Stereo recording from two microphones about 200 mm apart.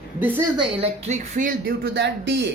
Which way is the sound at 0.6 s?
30° right (ahead or behind).